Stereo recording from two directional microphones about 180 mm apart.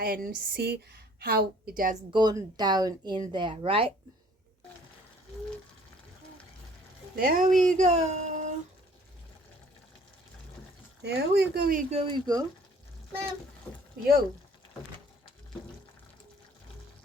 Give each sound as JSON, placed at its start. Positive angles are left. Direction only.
{"t": 0.0, "sound": "a woman's voice", "side_deg": -55}
{"t": 2.1, "sound": "speech", "side_deg": -25}
{"t": 7.2, "sound": "speech", "side_deg": -50}
{"t": 11.0, "sound": "a woman's voice", "side_deg": -65}
{"t": 11.9, "sound": "speech", "side_deg": -30}